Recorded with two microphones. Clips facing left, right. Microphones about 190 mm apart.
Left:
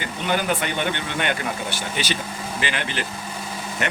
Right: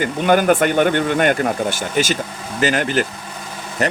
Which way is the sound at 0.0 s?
50° right (ahead or behind).